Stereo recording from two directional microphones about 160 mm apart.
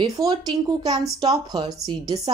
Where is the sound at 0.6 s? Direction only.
25° right (ahead or behind).